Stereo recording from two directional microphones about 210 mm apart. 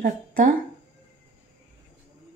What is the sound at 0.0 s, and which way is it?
Speech, 40° right (ahead or behind).